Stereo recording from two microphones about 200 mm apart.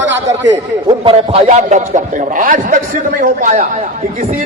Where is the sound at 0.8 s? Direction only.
25° right (ahead or behind).